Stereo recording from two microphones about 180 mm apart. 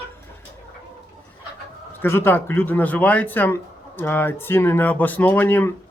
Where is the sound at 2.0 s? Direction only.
15° left (ahead or behind).